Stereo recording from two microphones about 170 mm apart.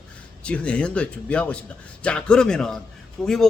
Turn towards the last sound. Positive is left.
turn(degrees=5)  # may be behind; listen again after turning